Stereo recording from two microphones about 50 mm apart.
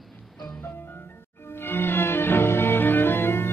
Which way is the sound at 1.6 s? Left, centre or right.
Left.